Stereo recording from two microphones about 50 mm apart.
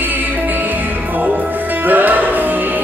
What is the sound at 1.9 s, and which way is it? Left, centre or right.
Music, right.